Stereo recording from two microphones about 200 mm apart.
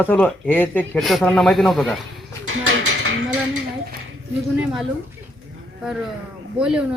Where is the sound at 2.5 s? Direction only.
85° right.